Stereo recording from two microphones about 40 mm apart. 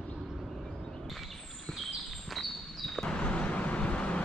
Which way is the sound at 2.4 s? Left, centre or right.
Centre.